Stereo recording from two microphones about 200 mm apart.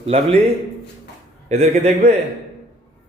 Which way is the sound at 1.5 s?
35° right (ahead or behind).